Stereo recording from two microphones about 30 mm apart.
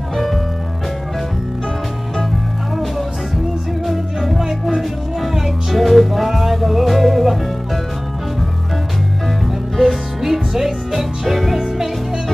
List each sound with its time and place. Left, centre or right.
0.1 s music: centre
3.8 s music: centre
4.5 s music: centre
5.3 s music: centre
9.8 s music: centre